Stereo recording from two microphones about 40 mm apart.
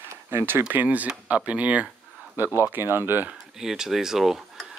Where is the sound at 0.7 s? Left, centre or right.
Right.